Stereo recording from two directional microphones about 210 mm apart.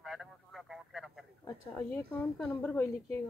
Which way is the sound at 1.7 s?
10° left (ahead or behind).